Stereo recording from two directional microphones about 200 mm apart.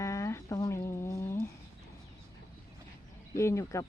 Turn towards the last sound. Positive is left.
turn(degrees=15)  # may be behind; listen again after turning